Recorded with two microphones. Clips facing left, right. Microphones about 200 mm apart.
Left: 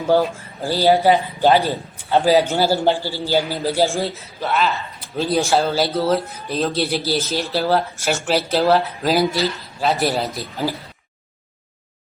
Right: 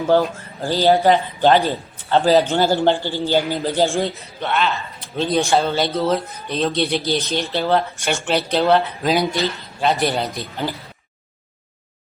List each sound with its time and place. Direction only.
0.1 s a man's voice: 10° left (ahead or behind)